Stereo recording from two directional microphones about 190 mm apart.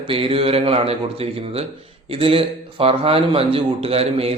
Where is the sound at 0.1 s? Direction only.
30° right (ahead or behind).